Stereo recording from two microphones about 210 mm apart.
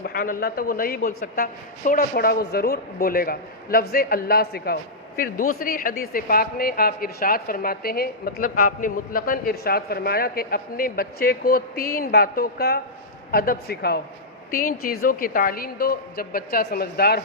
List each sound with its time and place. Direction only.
0.0 s a woman's voice: 45° left (ahead or behind)